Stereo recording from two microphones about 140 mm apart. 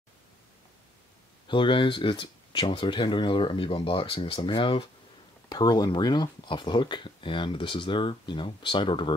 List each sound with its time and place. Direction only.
1.5 s speech: 35° left (ahead or behind)